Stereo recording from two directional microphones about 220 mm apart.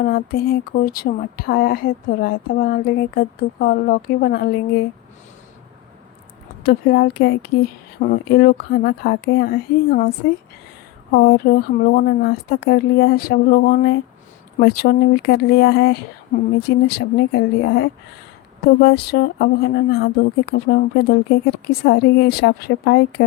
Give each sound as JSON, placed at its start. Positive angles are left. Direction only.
{"t": 0.0, "sound": "speech", "side_deg": 45}
{"t": 6.6, "sound": "speech", "side_deg": 45}
{"t": 11.1, "sound": "speech", "side_deg": 45}